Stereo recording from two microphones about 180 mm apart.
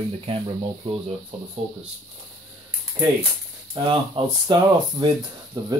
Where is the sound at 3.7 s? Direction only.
25° right (ahead or behind).